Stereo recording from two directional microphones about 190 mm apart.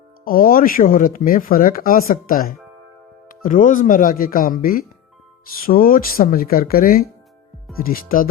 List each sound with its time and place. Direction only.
0.3 s speech: 50° left (ahead or behind)